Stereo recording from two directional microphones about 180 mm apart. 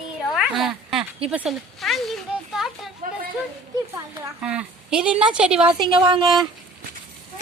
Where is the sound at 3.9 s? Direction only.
10° right (ahead or behind).